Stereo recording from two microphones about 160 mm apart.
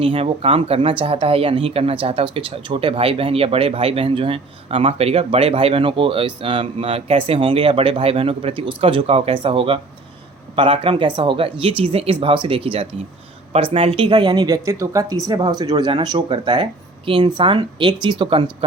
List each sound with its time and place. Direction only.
0.0 s speech: 35° right (ahead or behind)